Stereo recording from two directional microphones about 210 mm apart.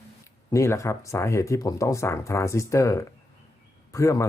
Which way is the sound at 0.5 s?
15° left (ahead or behind).